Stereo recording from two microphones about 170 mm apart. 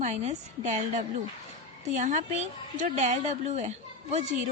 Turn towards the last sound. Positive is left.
turn(degrees=-40)  # may be behind; listen again after turning